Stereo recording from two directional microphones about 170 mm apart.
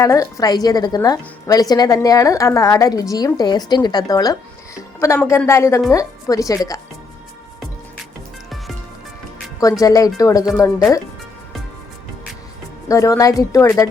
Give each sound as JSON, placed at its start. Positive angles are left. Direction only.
{"t": 0.0, "sound": "a woman's voice", "side_deg": 20}
{"t": 9.8, "sound": "a woman's voice", "side_deg": 20}
{"t": 12.9, "sound": "a woman's voice", "side_deg": 20}